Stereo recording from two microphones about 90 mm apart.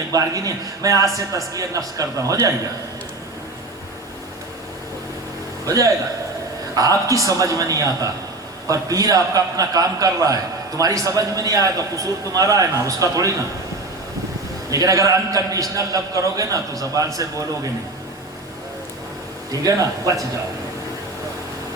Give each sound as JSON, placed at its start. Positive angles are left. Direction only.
{"t": 0.1, "sound": "a man's voice", "side_deg": -40}
{"t": 5.6, "sound": "a man's voice", "side_deg": -40}
{"t": 14.7, "sound": "a man's voice", "side_deg": -40}
{"t": 19.5, "sound": "a man's voice", "side_deg": -40}